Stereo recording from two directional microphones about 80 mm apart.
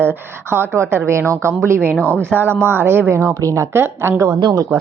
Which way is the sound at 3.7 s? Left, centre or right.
Right.